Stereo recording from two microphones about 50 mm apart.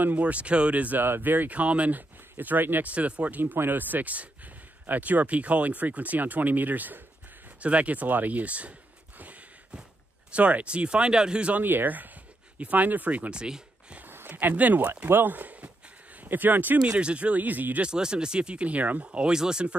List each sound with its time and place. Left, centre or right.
0.0 s speech: right
1.0 s speech: right
2.9 s speech: right
3.5 s speech: right
10.3 s speech: right
11.5 s speech: right
13.3 s a sound: centre
14.0 s a sound: right
14.5 s speech: right
16.8 s speech: right
17.8 s speech: centre